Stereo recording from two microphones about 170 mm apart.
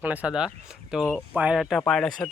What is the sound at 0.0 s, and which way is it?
Speech, 10° right (ahead or behind).